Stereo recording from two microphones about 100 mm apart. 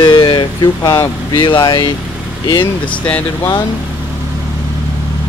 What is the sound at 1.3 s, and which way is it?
Speech, 50° left (ahead or behind).